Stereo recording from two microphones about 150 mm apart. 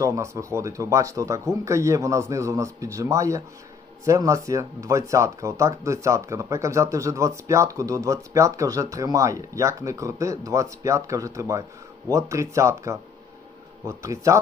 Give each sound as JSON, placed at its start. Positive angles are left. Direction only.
{"t": 0.0, "sound": "speech", "side_deg": -20}